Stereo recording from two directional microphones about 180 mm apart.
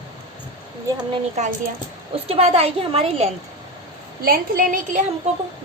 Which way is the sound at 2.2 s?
35° right (ahead or behind).